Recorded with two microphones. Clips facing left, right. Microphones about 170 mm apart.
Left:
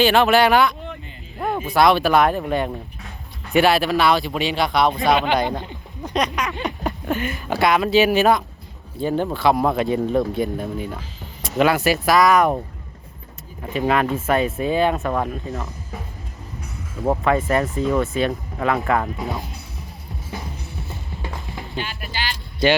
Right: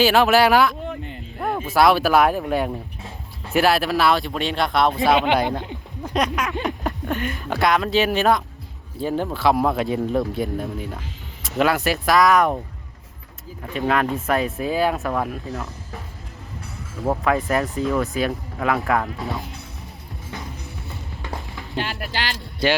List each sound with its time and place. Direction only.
0.0 s speech: 5° right (ahead or behind)
1.4 s a sound: centre (ahead or behind)
1.7 s speech: 5° right (ahead or behind)
13.6 s speech: 5° left (ahead or behind)
17.1 s speech: centre (ahead or behind)
21.4 s a sound: 20° left (ahead or behind)
21.8 s speech: 80° right